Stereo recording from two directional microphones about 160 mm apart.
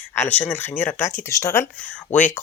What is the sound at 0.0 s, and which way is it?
Speech, 15° left (ahead or behind).